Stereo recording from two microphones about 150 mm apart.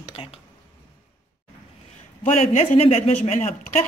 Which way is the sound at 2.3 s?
45° left (ahead or behind).